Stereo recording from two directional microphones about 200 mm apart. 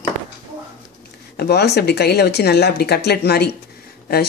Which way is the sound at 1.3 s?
55° left (ahead or behind).